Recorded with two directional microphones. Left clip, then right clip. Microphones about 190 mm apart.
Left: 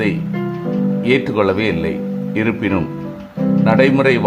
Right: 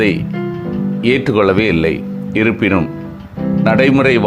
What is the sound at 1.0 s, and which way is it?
Speech, 20° right (ahead or behind).